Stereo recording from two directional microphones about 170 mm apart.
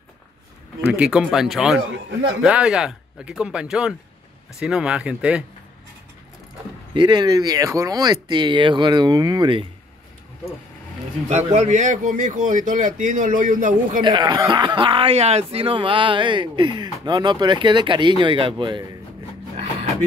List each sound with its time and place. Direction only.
0.8 s speech: 5° right (ahead or behind)
1.9 s speech: 90° right
2.4 s speech: 5° right (ahead or behind)
6.9 s speech: 25° right (ahead or behind)
11.2 s a man's voice: 40° right (ahead or behind)
14.0 s speech: 25° right (ahead or behind)